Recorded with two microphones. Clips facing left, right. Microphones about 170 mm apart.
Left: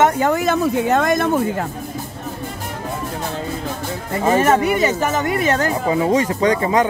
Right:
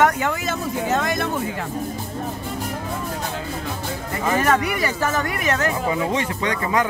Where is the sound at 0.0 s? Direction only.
30° left (ahead or behind).